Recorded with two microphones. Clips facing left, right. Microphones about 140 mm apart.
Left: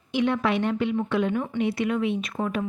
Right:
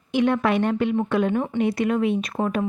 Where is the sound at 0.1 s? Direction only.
50° right (ahead or behind).